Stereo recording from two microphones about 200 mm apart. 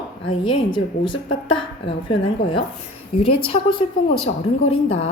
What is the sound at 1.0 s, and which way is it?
Speech, 75° left (ahead or behind).